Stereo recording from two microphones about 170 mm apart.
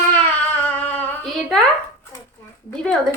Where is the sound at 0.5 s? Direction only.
10° left (ahead or behind).